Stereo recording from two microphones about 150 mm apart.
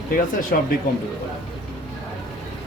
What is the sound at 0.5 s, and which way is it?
Speech, 90° left.